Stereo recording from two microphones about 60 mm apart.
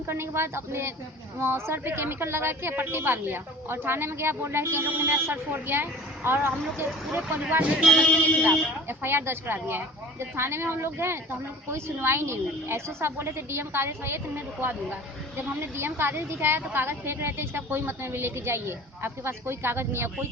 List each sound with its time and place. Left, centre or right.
0.1 s a woman's voice: right
7.2 s speech: centre
7.8 s speech: centre
8.9 s a woman's voice: right